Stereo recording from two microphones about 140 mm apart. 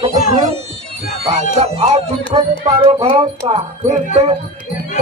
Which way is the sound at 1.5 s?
50° right (ahead or behind).